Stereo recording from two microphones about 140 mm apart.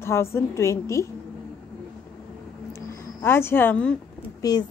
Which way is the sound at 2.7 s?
20° left (ahead or behind).